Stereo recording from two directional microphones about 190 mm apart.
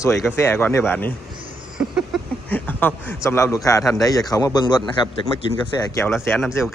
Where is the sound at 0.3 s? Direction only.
10° left (ahead or behind).